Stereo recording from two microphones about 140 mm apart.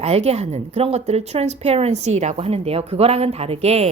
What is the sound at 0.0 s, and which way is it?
A woman's voice, 50° right (ahead or behind).